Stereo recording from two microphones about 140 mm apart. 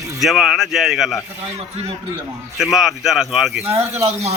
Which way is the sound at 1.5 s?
50° right (ahead or behind).